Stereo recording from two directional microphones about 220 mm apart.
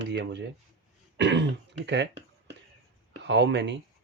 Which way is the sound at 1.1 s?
55° right (ahead or behind).